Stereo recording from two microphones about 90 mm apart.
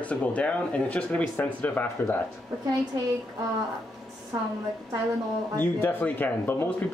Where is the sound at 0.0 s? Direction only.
15° left (ahead or behind).